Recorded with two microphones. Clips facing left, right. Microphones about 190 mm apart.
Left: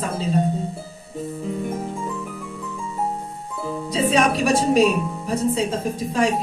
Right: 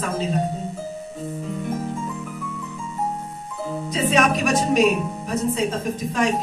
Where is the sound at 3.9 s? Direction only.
35° left (ahead or behind).